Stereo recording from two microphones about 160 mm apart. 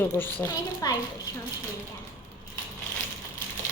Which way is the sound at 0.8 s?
25° left (ahead or behind).